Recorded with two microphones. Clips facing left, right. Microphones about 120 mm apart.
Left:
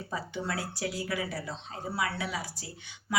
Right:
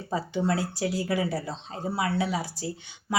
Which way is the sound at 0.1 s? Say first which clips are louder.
Right 8 dB; 30° right (ahead or behind).